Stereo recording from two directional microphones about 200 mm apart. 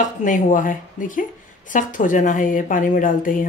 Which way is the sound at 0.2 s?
40° left (ahead or behind).